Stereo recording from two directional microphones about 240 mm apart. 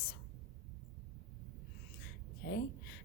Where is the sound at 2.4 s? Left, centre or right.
Left.